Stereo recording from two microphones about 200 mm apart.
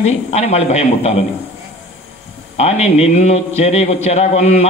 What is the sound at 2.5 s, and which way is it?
A man's voice, 30° left (ahead or behind).